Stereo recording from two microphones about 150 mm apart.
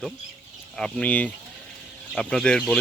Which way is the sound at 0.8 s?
5° left (ahead or behind).